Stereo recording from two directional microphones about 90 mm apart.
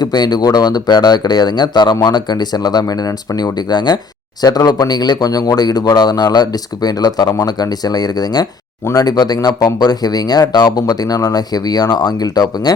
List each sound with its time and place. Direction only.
0.0 s speech: 50° left (ahead or behind)